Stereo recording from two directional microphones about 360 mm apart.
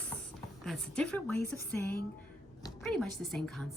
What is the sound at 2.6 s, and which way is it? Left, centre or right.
A woman's voice, centre.